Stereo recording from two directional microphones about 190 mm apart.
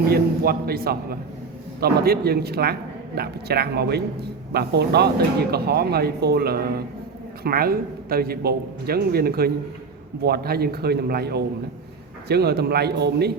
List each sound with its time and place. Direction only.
0.1 s a man's voice: 55° right (ahead or behind)